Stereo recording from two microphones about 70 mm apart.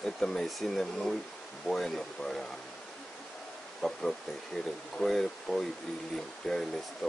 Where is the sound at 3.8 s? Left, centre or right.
Centre.